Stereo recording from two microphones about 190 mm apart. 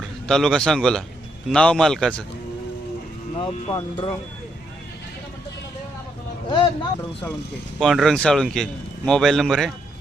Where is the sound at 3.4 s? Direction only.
30° left (ahead or behind).